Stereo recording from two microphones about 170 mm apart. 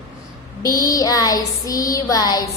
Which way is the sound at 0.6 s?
20° left (ahead or behind).